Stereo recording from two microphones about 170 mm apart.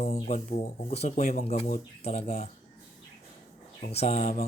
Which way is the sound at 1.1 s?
55° left (ahead or behind).